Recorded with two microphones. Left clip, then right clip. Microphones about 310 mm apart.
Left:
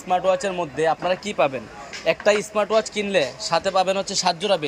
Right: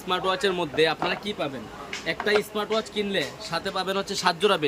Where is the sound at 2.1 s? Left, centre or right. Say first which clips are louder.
Left 5 dB; centre.